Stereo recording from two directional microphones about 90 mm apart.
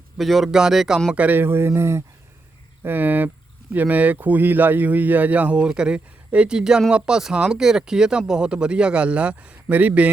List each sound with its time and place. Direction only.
0.2 s speech: centre (ahead or behind)
1.1 s speech: 15° right (ahead or behind)